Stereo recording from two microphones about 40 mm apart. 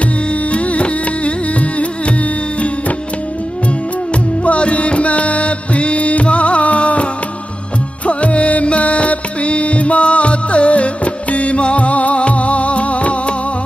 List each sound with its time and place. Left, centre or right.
0.5 s music: left
4.5 s music: left
8.1 s music: left